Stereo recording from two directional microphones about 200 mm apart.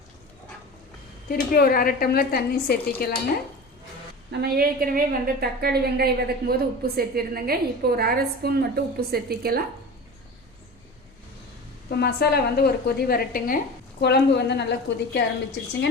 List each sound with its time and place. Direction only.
1.3 s a woman's voice: 50° left (ahead or behind)
4.3 s a woman's voice: 50° right (ahead or behind)
11.9 s a woman's voice: 55° left (ahead or behind)